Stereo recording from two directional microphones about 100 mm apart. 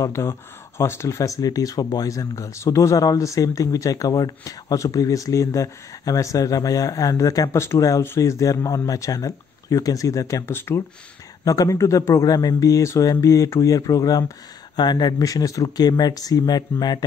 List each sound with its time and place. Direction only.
0.0 s speech: 30° left (ahead or behind)
11.4 s speech: 35° left (ahead or behind)